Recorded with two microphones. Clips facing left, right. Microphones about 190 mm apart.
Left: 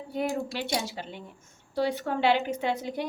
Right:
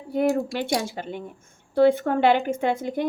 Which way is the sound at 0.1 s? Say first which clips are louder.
Right 8 dB; 50° right (ahead or behind).